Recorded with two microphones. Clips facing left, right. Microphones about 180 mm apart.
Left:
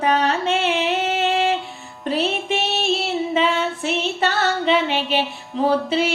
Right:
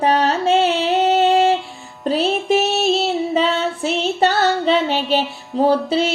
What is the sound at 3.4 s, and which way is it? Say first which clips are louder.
Female singing: right 2 dB; 35° right (ahead or behind).